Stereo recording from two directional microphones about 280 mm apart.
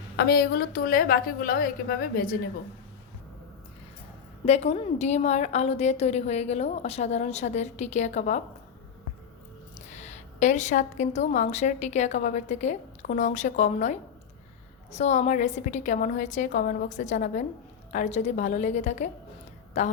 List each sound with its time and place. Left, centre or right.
0.2 s a woman's voice: left
4.4 s a woman's voice: left
9.7 s a woman's voice: left